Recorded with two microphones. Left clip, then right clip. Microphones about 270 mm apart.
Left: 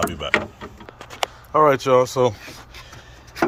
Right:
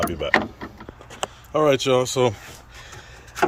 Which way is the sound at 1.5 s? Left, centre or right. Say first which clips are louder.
Left 3 dB; centre.